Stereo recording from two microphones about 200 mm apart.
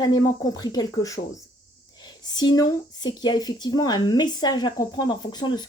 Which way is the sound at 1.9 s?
20° left (ahead or behind).